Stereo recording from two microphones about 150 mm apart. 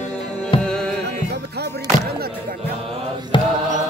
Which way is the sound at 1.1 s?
90° right.